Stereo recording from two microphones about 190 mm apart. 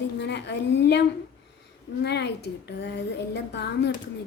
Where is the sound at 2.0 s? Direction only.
65° left (ahead or behind).